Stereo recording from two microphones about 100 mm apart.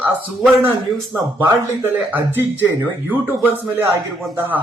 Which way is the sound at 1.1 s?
20° right (ahead or behind).